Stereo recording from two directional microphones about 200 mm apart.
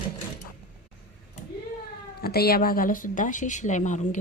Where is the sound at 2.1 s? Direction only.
50° left (ahead or behind).